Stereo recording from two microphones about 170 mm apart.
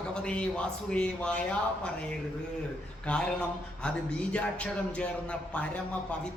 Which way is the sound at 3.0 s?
5° left (ahead or behind).